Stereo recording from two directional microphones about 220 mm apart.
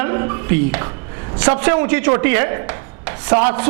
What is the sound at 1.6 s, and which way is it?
A man's voice, 15° right (ahead or behind).